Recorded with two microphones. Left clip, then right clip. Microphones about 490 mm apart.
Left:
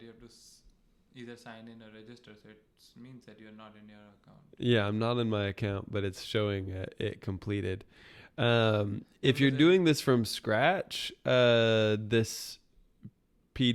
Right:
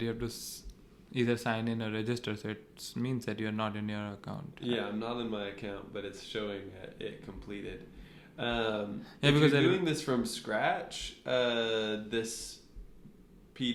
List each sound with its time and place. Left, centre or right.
0.0 s speech: right
4.6 s speech: left
13.5 s speech: left